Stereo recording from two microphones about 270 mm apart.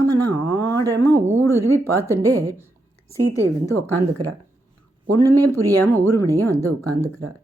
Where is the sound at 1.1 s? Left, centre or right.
Centre.